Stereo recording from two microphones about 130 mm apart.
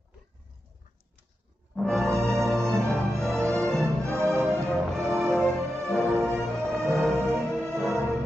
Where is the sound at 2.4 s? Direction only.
Centre (ahead or behind).